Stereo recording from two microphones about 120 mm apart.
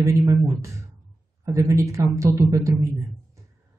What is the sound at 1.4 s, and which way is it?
Speech, 25° right (ahead or behind).